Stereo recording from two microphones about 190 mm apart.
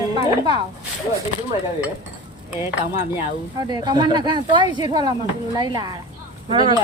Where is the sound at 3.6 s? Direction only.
20° right (ahead or behind).